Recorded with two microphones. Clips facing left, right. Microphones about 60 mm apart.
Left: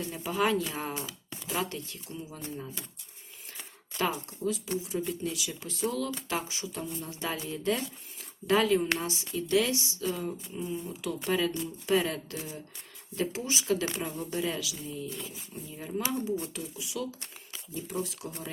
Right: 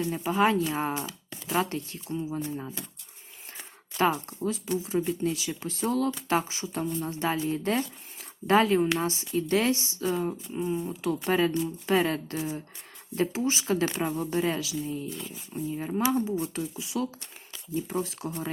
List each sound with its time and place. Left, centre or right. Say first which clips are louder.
0.3 s speech: right 4 dB; right
3.9 s speech: right 6 dB; right